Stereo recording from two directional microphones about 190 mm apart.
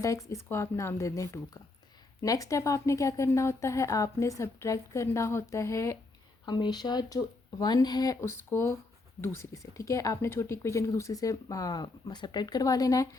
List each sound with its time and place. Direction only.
0.0 s a woman's voice: 15° left (ahead or behind)